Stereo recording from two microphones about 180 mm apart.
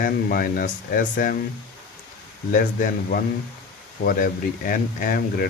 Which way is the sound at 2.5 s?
50° left (ahead or behind).